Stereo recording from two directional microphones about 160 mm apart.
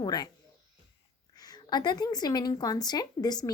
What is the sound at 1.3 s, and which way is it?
A woman's voice, 25° left (ahead or behind).